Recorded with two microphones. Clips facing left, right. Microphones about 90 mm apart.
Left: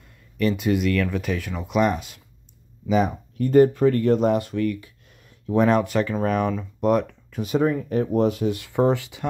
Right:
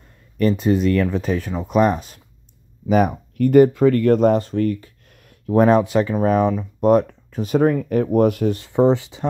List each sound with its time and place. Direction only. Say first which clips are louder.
0.4 s speech: right 4 dB; 35° right (ahead or behind)
2.9 s speech: right 4 dB; 60° right (ahead or behind); by 4.1 s 90° right
4.1 s speech: right 4 dB; 40° right (ahead or behind)
5.1 s a sound: right 4 dB; 50° right (ahead or behind)
5.8 s speech: right 4 dB; 25° right (ahead or behind)
7.6 s speech: right 5 dB; 80° right; by 8.5 s 60° right (ahead or behind)
8.5 s speech: right 4 dB; 30° right (ahead or behind)